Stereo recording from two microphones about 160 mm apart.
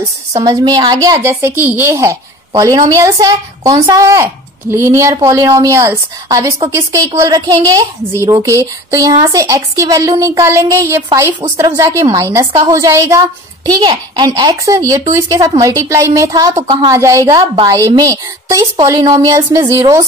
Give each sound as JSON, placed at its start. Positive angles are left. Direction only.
{"t": 0.4, "sound": "a child's voice", "side_deg": -25}
{"t": 16.9, "sound": "speech", "side_deg": -20}